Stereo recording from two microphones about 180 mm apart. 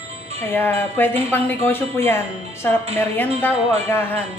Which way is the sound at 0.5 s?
10° left (ahead or behind).